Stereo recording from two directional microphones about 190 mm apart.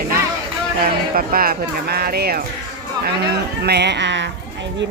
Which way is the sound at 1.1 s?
50° right (ahead or behind).